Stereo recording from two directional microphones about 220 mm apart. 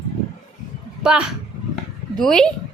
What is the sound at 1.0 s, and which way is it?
Speech, 5° right (ahead or behind).